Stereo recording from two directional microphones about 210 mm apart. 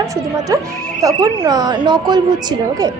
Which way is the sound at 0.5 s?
15° right (ahead or behind).